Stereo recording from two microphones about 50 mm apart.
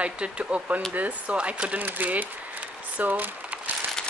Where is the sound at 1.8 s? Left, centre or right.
Right.